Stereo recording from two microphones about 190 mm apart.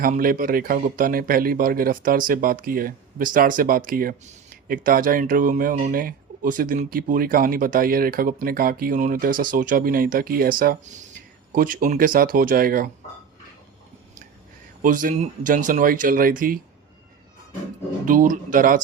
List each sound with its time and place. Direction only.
0.0 s speech: 50° right (ahead or behind)
14.8 s speech: 45° right (ahead or behind)
18.0 s speech: 45° right (ahead or behind)